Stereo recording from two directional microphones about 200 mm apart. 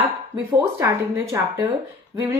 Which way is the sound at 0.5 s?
15° right (ahead or behind).